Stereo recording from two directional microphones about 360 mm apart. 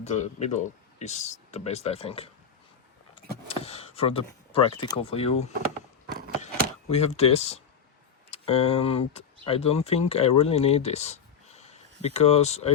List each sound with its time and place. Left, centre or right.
0.0 s speech: centre
3.2 s a sound: centre
6.9 s speech: centre